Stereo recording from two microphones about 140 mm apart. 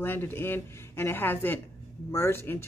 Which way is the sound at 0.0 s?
15° left (ahead or behind).